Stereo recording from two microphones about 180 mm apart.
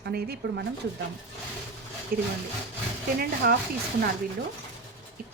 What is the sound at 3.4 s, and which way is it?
Speech, 60° right (ahead or behind).